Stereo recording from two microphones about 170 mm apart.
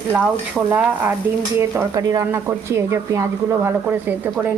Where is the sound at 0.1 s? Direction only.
10° right (ahead or behind).